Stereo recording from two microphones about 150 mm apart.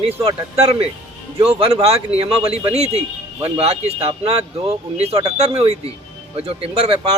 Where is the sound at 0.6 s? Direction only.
45° right (ahead or behind).